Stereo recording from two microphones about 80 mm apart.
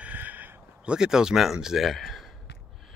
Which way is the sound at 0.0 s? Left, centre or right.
Right.